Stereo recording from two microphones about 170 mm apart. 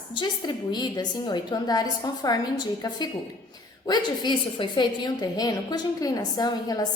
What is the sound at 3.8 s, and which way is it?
A woman's voice, 25° left (ahead or behind).